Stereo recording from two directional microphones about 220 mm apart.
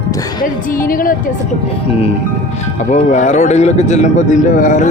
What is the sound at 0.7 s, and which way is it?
Speech, 40° left (ahead or behind).